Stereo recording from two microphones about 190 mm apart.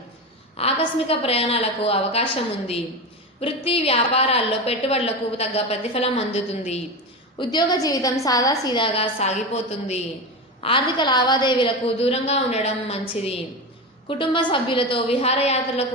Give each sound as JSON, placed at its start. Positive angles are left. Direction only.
{"t": 0.5, "sound": "a woman's voice", "side_deg": 30}
{"t": 7.3, "sound": "a woman's voice", "side_deg": 20}